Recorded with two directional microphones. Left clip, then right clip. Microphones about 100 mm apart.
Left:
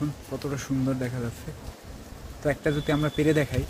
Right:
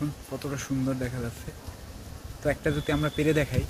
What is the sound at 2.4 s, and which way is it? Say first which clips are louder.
Speech: left 1 dB; 25° right (ahead or behind).